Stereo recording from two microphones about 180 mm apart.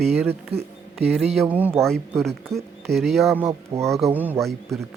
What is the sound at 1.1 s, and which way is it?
Speech, centre (ahead or behind).